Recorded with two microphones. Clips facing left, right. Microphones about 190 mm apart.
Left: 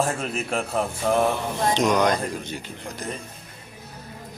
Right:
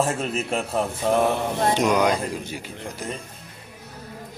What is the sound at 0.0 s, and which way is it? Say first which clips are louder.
Speech: right 1 dB; centre (ahead or behind).